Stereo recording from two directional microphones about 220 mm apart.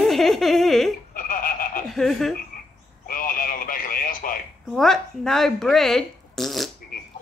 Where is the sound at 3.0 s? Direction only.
40° left (ahead or behind).